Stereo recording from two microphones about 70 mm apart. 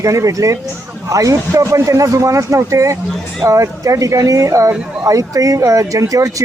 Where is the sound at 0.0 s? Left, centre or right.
Right.